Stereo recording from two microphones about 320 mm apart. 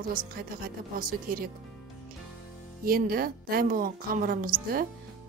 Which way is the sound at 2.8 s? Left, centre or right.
Right.